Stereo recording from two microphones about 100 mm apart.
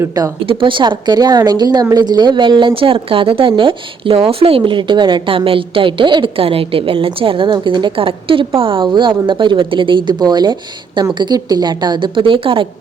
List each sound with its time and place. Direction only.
0.0 s speech: 35° right (ahead or behind)
0.4 s a woman's voice: 60° right (ahead or behind)